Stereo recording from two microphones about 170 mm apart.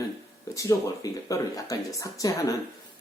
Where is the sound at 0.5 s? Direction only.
20° left (ahead or behind).